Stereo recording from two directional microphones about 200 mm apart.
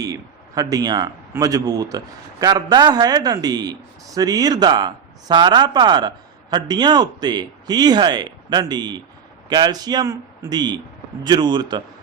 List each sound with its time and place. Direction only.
0.0 s a man's voice: 15° right (ahead or behind)